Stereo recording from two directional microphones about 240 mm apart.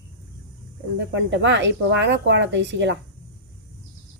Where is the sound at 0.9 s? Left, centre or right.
Right.